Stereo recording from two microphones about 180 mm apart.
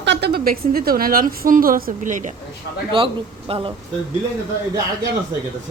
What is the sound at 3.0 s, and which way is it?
Speech, 30° right (ahead or behind).